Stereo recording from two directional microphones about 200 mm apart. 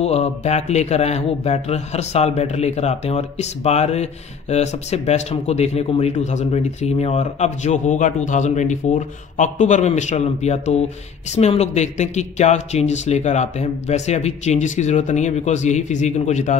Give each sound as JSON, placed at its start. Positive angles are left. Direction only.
{"t": 0.0, "sound": "speech", "side_deg": 30}